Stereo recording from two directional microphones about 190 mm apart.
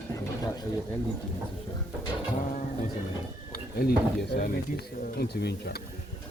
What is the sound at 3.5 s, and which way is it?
Speech, 55° left (ahead or behind).